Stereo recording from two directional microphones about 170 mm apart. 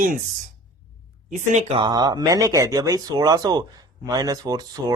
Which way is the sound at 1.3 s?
45° right (ahead or behind).